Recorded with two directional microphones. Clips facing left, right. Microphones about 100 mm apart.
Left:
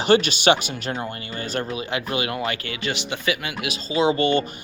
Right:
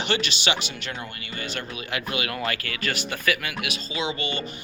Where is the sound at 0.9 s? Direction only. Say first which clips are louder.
Left 6 dB; 35° left (ahead or behind); by 4.4 s 50° left (ahead or behind).